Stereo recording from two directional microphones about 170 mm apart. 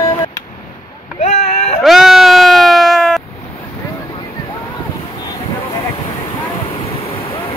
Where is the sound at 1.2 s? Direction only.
45° left (ahead or behind).